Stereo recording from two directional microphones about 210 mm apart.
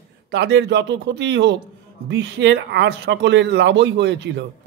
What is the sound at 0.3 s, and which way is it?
A man's voice, 55° right (ahead or behind).